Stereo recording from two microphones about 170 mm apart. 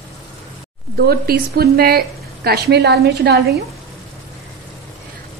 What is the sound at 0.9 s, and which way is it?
A woman's voice, 65° right (ahead or behind).